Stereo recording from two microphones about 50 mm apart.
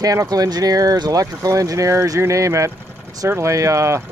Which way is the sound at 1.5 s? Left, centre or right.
Right.